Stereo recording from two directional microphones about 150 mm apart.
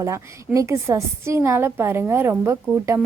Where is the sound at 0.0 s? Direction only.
20° right (ahead or behind).